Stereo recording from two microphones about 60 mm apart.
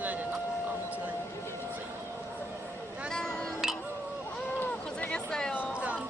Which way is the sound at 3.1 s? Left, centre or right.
Centre.